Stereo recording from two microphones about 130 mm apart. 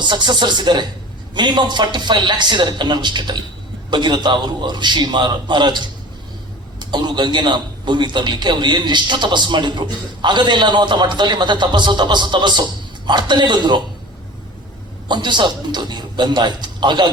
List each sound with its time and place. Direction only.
0.0 s a man's voice: 35° right (ahead or behind)
15.0 s a man's voice: 35° right (ahead or behind)